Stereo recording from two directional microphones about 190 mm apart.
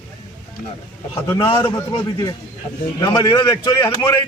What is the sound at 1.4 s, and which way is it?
A man's voice, 25° left (ahead or behind).